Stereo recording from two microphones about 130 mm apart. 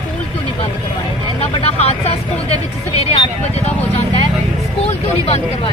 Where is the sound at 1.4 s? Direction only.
50° left (ahead or behind).